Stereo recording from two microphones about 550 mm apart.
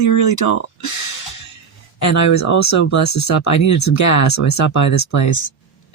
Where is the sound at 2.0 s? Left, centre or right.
Left.